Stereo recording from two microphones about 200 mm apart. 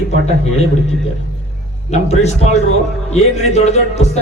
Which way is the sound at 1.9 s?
35° left (ahead or behind).